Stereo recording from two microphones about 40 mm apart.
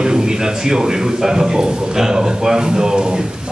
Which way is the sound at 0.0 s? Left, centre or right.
Centre.